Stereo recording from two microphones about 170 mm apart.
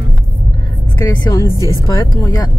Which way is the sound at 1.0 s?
20° left (ahead or behind).